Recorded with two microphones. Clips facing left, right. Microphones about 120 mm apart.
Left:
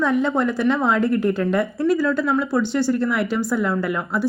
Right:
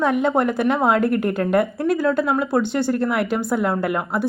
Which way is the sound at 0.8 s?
55° right (ahead or behind).